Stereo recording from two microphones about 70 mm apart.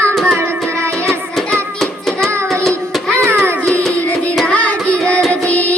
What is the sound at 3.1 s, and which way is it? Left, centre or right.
Music, right.